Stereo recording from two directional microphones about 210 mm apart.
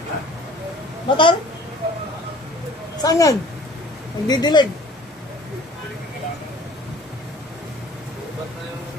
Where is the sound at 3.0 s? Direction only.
15° left (ahead or behind).